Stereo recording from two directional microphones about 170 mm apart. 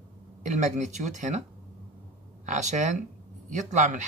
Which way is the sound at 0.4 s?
45° right (ahead or behind).